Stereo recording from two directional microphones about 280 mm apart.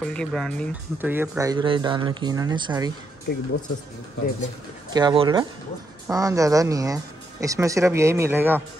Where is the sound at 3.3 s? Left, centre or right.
Left.